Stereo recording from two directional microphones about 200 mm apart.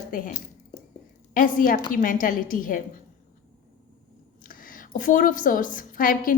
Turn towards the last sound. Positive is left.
turn(degrees=45)  # may be behind; listen again after turning